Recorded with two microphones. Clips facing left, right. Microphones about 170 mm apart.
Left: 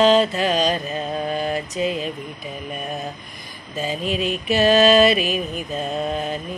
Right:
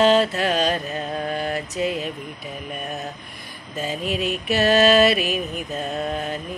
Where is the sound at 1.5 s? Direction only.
5° right (ahead or behind).